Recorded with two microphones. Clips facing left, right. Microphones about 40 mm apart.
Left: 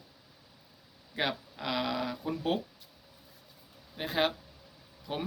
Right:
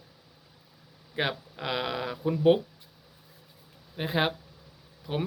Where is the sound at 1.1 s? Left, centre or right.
Centre.